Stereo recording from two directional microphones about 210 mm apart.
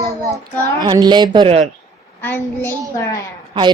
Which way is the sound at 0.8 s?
20° right (ahead or behind).